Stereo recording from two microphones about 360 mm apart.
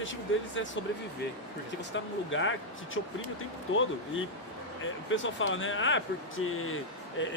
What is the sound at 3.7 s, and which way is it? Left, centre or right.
Speech, left.